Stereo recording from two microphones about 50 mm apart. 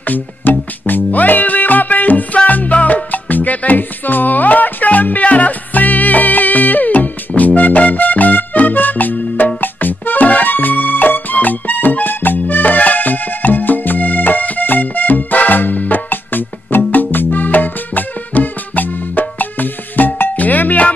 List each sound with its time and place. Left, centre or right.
0.0 s music: left